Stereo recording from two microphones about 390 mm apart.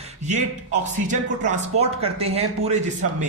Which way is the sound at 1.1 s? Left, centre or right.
Centre.